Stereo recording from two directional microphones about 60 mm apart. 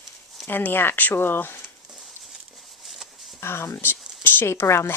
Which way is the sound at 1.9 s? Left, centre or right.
Centre.